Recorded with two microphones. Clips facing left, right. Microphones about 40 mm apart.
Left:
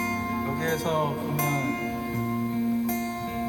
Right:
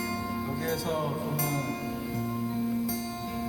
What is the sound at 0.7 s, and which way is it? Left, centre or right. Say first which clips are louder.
Music: left 4 dB; left.